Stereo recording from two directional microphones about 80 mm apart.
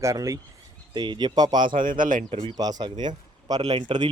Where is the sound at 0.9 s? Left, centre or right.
Right.